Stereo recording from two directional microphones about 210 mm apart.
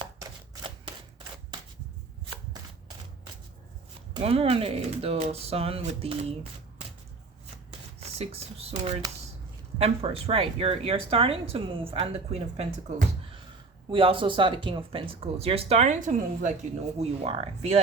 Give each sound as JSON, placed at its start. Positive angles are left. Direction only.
{"t": 4.1, "sound": "speech", "side_deg": -30}
{"t": 8.2, "sound": "speech", "side_deg": -30}
{"t": 13.9, "sound": "speech", "side_deg": -25}